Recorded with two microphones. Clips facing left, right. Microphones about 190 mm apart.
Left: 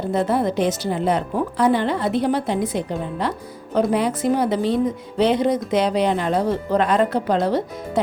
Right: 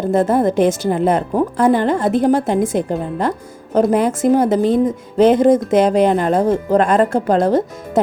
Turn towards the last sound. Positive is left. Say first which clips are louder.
# right 5 dB
turn(degrees=-45)  # may be behind; listen again after turning